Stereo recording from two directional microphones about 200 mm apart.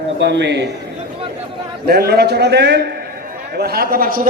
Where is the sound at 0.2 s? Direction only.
60° right (ahead or behind).